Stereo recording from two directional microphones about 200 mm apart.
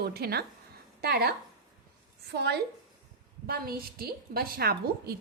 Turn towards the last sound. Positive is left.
turn(degrees=-50)  # may be behind; listen again after turning